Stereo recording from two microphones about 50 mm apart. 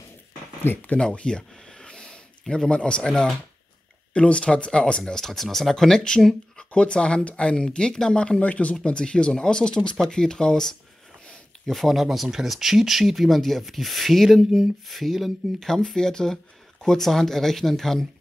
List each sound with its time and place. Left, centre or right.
0.9 s a sound: centre
2.4 s a man's voice: centre
5.1 s speech: centre
8.4 s speech: left; by 10.8 s centre
11.6 s speech: centre